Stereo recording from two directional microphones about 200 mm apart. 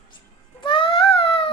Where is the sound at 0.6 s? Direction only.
25° left (ahead or behind).